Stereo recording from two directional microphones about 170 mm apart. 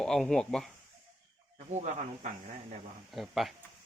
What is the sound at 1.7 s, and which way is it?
Speech, 40° right (ahead or behind).